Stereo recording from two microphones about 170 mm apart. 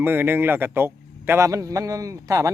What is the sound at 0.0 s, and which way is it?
A man's voice, 10° right (ahead or behind).